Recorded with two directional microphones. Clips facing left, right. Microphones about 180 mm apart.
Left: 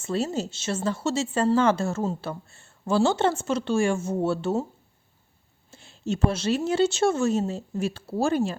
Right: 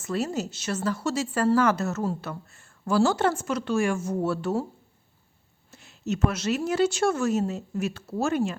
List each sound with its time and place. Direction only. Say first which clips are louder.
0.0 s speech: left 1 dB; 25° left (ahead or behind)
5.7 s speech: left 1 dB; 30° left (ahead or behind)